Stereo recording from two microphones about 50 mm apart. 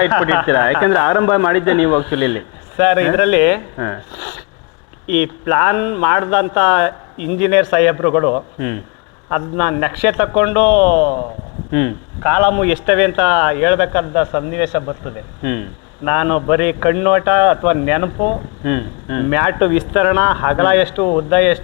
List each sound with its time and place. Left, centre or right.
0.0 s a man's voice: centre